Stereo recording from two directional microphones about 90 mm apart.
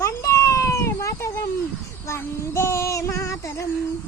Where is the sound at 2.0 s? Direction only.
30° left (ahead or behind).